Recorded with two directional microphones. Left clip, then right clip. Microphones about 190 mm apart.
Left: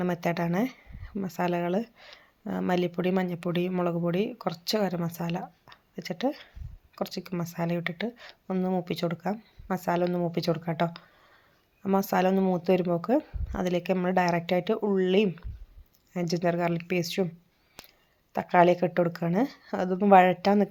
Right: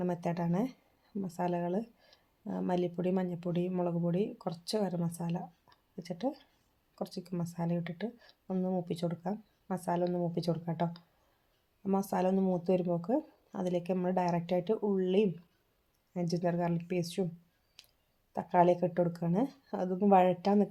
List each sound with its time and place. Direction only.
0.0 s speech: 20° left (ahead or behind)
18.3 s speech: 20° left (ahead or behind)